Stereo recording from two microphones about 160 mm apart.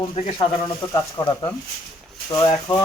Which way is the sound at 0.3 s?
30° left (ahead or behind).